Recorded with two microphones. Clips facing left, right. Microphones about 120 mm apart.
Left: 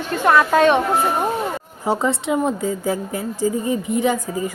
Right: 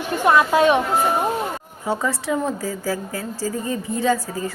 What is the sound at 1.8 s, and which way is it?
A woman's voice, 25° left (ahead or behind).